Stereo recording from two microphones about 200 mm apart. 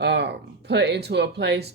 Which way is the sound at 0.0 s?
60° right (ahead or behind).